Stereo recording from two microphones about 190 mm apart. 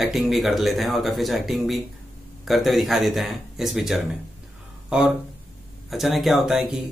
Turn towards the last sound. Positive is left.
turn(degrees=0)  # may be behind; listen again after turning